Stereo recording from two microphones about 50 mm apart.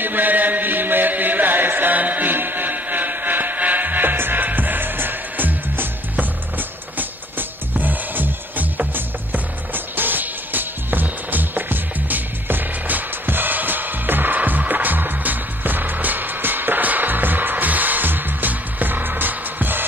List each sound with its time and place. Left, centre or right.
0.0 s chant: right
7.0 s music: right